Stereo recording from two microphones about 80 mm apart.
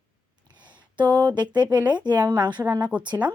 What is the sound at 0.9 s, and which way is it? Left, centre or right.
Speech, right.